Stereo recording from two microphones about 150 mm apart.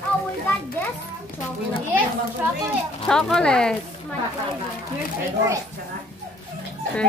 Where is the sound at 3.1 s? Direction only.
5° left (ahead or behind).